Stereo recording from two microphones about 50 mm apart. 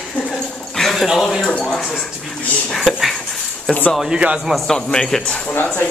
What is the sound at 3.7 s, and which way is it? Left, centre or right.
Speech, centre.